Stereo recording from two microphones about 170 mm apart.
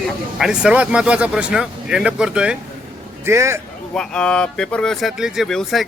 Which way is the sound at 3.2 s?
15° right (ahead or behind).